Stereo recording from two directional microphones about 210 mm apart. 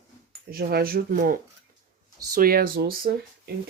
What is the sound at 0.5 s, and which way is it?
Speech, 45° right (ahead or behind).